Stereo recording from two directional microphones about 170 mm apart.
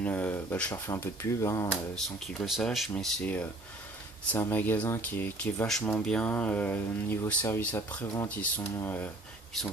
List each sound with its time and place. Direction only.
0.0 s speech: 10° left (ahead or behind)
2.3 s speech: centre (ahead or behind)